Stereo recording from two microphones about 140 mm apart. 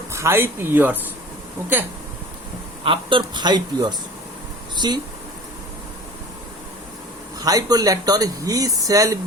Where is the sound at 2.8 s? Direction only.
40° right (ahead or behind).